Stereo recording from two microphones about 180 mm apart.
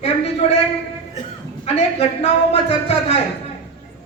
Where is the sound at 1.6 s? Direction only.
35° left (ahead or behind).